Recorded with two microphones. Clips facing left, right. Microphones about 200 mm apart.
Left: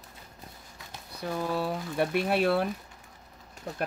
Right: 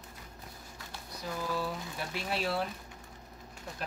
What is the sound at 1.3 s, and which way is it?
Speech, 60° left (ahead or behind).